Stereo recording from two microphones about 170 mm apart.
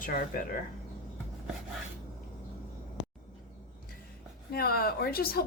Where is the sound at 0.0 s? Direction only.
50° left (ahead or behind).